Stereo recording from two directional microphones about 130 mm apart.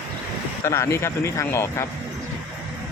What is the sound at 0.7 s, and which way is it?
Speech, 20° left (ahead or behind).